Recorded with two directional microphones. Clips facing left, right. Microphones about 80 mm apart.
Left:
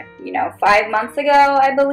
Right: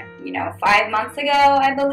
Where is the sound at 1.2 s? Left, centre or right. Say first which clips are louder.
Left 3 dB; left.